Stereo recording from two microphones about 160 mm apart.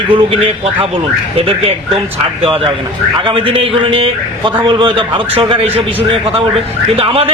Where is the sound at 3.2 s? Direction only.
35° right (ahead or behind).